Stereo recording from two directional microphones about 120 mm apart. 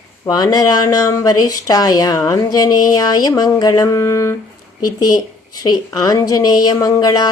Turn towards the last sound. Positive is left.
turn(degrees=30)  # may be behind; listen again after turning